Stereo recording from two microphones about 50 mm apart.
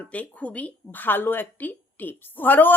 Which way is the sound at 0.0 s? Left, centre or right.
Left.